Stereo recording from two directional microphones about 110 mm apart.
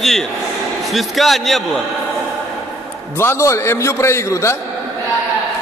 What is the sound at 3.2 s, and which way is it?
A man's voice, 25° left (ahead or behind).